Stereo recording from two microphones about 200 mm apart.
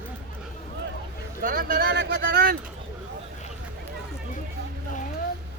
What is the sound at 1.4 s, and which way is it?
Vehicle, 45° right (ahead or behind).